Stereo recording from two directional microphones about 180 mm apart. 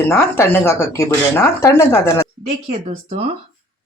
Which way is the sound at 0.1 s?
10° left (ahead or behind).